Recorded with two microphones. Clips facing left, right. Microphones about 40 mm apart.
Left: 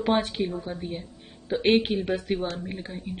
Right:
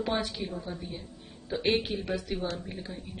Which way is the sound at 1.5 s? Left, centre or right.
Left.